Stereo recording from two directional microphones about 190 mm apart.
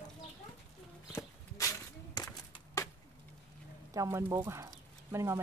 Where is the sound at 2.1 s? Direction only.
20° left (ahead or behind).